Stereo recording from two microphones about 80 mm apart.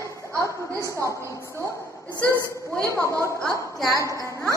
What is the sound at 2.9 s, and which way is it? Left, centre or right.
Speech, right.